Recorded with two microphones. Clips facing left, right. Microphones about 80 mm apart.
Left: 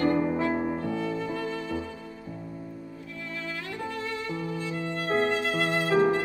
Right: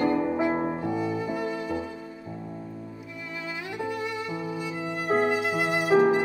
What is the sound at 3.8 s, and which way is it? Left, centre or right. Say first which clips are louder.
Music: right 3 dB; centre.